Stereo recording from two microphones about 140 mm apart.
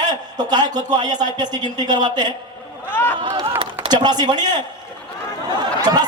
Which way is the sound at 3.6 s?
35° right (ahead or behind).